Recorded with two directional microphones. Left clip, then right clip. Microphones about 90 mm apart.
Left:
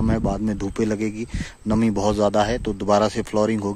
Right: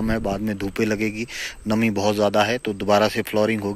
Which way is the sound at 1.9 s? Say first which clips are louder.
Even; 70° left (ahead or behind).